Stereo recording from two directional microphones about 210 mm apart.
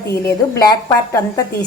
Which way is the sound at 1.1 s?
15° left (ahead or behind).